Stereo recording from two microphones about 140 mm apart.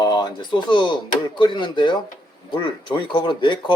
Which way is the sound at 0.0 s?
30° left (ahead or behind).